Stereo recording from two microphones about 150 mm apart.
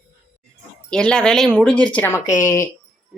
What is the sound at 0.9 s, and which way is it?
Speech, 5° left (ahead or behind).